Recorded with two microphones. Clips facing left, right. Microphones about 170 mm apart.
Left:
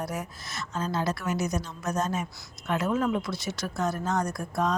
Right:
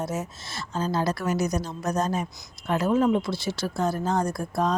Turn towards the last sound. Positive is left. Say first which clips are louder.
# right 3 dB
turn(degrees=-30)  # may be behind; listen again after turning